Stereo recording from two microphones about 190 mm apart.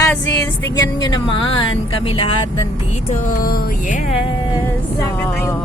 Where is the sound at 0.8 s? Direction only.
20° left (ahead or behind).